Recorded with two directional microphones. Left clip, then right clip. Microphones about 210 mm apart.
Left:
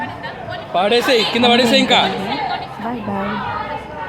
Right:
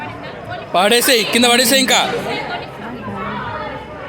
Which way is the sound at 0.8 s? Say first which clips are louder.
Right 1 dB; 30° right (ahead or behind).